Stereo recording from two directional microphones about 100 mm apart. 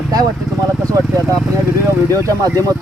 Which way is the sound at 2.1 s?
35° right (ahead or behind).